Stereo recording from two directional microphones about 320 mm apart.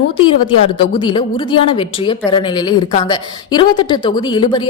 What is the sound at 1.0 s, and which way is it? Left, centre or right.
A woman's voice, centre.